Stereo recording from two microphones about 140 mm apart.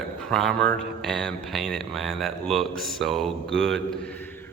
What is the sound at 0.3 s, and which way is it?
Speech, 5° left (ahead or behind).